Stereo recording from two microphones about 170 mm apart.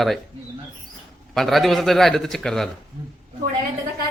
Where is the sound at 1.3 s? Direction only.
Centre (ahead or behind).